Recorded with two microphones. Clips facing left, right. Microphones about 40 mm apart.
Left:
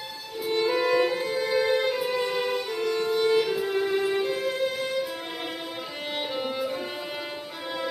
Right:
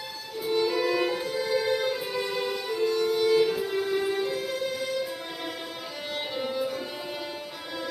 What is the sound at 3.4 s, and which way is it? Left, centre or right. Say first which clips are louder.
Music: left 1 dB; centre.